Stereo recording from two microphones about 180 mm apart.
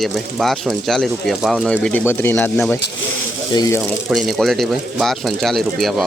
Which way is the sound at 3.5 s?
20° left (ahead or behind).